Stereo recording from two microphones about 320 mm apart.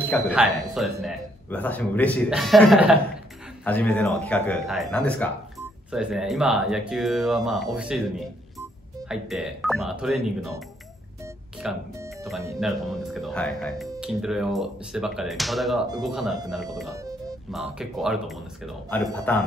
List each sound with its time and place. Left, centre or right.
0.3 s speech: centre
9.1 s speech: centre
11.6 s speech: centre